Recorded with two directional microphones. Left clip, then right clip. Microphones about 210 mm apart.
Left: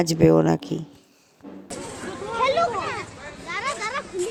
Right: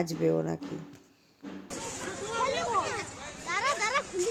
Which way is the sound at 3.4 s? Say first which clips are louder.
Left 1 dB; 30° right (ahead or behind).